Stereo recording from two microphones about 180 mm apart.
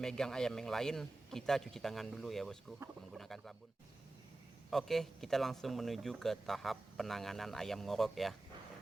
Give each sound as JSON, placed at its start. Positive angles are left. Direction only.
{"t": 0.0, "sound": "speech", "side_deg": 5}
{"t": 4.7, "sound": "speech", "side_deg": 0}